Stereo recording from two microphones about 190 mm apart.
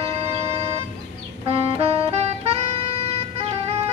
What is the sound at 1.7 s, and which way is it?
Music, 35° right (ahead or behind).